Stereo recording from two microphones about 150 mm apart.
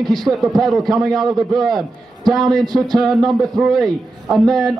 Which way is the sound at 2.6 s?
25° right (ahead or behind).